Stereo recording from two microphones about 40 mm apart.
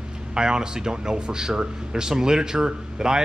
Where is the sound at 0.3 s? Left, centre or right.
Centre.